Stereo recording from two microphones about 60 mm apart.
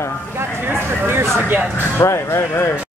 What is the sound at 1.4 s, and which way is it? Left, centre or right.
Speech, right.